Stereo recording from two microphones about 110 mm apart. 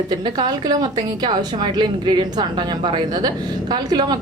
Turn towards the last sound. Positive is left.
turn(degrees=-40)  # may be behind; listen again after turning